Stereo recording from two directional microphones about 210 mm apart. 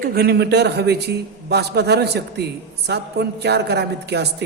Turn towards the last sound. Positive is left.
turn(degrees=-50)  # may be behind; listen again after turning